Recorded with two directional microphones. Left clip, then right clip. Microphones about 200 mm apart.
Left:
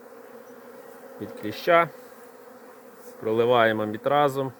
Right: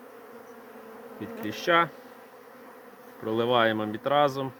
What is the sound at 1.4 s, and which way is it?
Speech, 35° left (ahead or behind).